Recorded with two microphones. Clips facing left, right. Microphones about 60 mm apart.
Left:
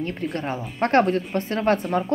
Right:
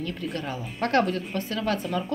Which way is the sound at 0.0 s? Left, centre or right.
Left.